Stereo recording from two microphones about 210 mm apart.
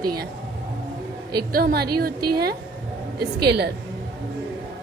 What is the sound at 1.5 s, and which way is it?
A woman's voice, 45° right (ahead or behind).